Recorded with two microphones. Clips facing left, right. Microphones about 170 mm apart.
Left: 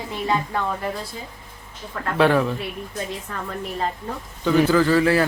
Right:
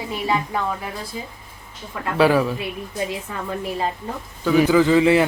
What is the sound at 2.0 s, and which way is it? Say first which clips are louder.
A woman's voice: right 1 dB; 5° right (ahead or behind).